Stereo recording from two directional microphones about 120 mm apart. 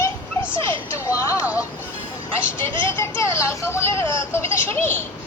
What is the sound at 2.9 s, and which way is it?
Speech, 25° left (ahead or behind).